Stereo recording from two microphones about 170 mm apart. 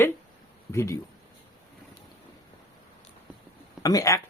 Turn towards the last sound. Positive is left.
turn(degrees=20)  # may be behind; listen again after turning